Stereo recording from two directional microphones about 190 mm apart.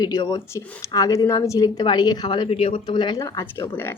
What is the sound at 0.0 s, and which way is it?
A woman's voice, 20° left (ahead or behind).